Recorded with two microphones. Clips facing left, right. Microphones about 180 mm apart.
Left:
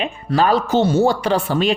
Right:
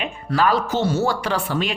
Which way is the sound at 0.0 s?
25° left (ahead or behind).